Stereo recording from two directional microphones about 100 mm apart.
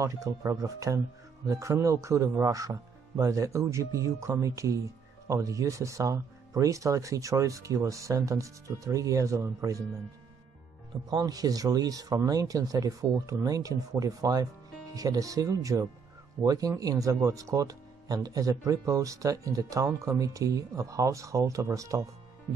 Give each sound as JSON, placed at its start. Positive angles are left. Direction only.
{"t": 0.0, "sound": "speech", "side_deg": -35}
{"t": 11.1, "sound": "speech", "side_deg": -40}